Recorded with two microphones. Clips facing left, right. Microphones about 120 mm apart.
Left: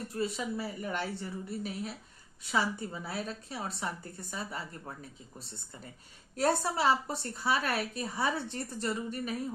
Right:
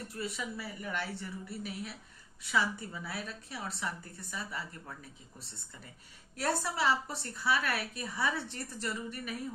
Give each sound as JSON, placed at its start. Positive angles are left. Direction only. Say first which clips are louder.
{"t": 0.1, "sound": "a woman's voice", "louder": "left 7 dB", "side_deg": 30}
{"t": 6.3, "sound": "a woman's voice", "louder": "left 4 dB", "side_deg": 30}